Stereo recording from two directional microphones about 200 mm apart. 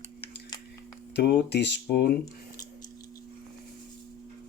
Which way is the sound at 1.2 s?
55° left (ahead or behind).